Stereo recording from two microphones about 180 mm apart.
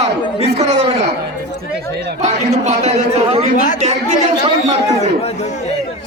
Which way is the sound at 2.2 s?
40° right (ahead or behind).